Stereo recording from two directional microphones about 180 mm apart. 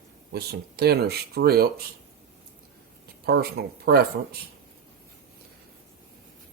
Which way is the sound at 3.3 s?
60° right (ahead or behind).